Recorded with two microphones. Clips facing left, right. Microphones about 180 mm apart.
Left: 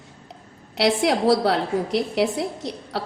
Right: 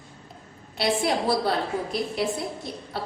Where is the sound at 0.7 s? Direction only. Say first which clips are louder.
Left 4 dB; 80° left.